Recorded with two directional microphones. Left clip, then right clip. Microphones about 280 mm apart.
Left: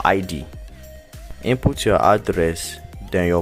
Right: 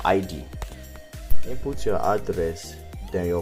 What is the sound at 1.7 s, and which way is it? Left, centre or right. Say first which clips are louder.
Speech: left 7 dB; left.